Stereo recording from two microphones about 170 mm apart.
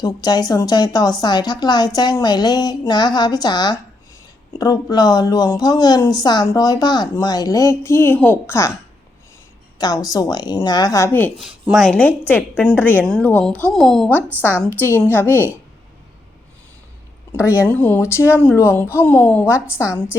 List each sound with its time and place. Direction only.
0.0 s a woman's voice: 25° left (ahead or behind)
9.7 s a woman's voice: 20° left (ahead or behind)
11.3 s a woman's voice: centre (ahead or behind)
14.8 s a woman's voice: 15° left (ahead or behind)
17.3 s speech: 10° right (ahead or behind)
17.7 s a woman's voice: 10° left (ahead or behind)